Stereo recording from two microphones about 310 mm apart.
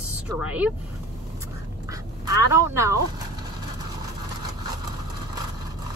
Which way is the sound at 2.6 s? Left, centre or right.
Centre.